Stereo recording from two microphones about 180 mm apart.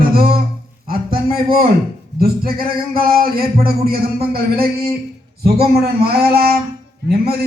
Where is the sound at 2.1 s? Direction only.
55° right (ahead or behind).